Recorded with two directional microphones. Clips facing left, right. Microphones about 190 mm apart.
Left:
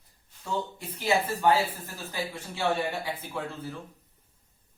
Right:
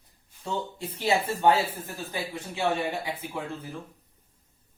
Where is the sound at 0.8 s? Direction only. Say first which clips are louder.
Right 1 dB; 30° right (ahead or behind).